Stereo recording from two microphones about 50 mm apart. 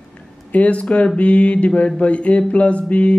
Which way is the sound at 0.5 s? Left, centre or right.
Left.